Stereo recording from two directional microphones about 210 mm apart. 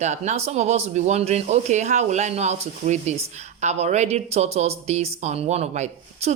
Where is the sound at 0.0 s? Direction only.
35° right (ahead or behind).